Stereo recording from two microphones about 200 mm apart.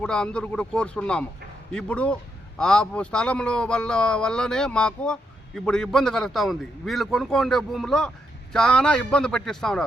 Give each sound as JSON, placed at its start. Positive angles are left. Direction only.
{"t": 0.0, "sound": "a man's voice", "side_deg": 5}